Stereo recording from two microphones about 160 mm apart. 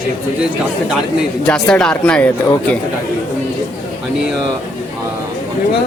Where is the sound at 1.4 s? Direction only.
5° left (ahead or behind).